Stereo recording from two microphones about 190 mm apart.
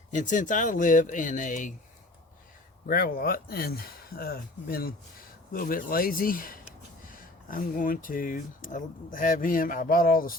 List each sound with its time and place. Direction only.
0.1 s speech: 40° left (ahead or behind)
2.8 s speech: 50° left (ahead or behind)